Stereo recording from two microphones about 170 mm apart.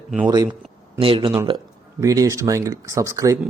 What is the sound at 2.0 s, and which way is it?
Speech, 20° right (ahead or behind).